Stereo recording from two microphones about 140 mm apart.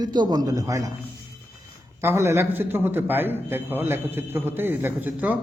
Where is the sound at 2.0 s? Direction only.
20° right (ahead or behind).